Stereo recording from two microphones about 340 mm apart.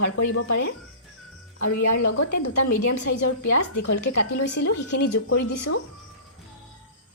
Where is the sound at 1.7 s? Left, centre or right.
Left.